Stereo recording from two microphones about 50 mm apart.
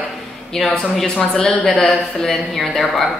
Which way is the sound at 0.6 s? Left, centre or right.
Centre.